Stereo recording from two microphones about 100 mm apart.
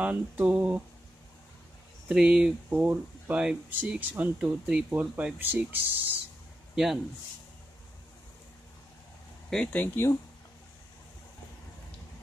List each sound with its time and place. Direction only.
0.0 s speech: 15° right (ahead or behind)
2.0 s speech: 5° right (ahead or behind)
2.7 s speech: 20° right (ahead or behind)
6.7 s speech: 5° right (ahead or behind)
9.5 s speech: 5° left (ahead or behind)
9.8 s speech: 25° left (ahead or behind)